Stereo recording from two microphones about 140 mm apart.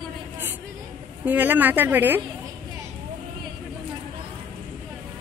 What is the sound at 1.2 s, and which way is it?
Speech, 10° right (ahead or behind).